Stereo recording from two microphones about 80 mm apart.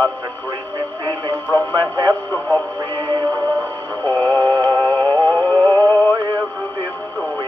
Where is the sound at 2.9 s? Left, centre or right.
Right.